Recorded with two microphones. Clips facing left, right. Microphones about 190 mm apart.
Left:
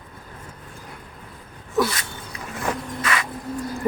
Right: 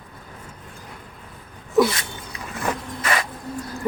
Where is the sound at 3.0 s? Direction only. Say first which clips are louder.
Right 2 dB; 35° right (ahead or behind).